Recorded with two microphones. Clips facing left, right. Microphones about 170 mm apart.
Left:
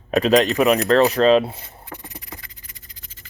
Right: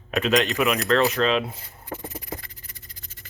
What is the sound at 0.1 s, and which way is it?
Speech, 35° left (ahead or behind).